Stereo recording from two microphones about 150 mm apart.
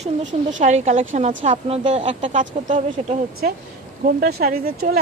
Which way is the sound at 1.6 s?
40° right (ahead or behind).